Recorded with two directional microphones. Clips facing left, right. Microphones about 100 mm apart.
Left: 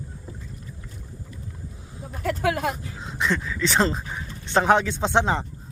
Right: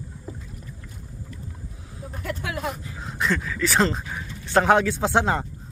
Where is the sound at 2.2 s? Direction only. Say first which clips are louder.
Left 6 dB; 40° left (ahead or behind).